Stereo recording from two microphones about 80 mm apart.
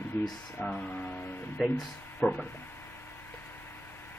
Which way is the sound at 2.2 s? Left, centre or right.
Centre.